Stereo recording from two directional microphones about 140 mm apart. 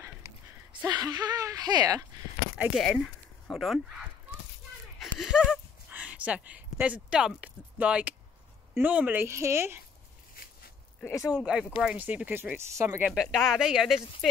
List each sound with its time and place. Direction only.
0.8 s speech: 30° right (ahead or behind)
2.8 s speech: centre (ahead or behind)
5.0 s speech: centre (ahead or behind); by 9.8 s 20° right (ahead or behind)
11.1 s speech: 20° left (ahead or behind)
11.3 s speech: 5° right (ahead or behind); by 13.0 s 20° right (ahead or behind)
13.0 s speech: 5° right (ahead or behind)